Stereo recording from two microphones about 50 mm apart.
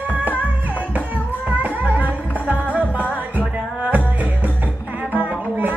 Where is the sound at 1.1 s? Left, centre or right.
Right.